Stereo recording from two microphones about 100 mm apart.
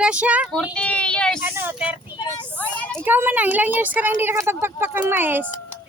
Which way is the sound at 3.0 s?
20° right (ahead or behind).